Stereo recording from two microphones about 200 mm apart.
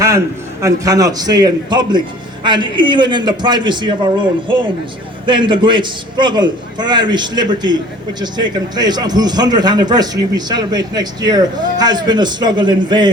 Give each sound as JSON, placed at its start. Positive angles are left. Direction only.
{"t": 0.6, "sound": "a man's voice", "side_deg": -15}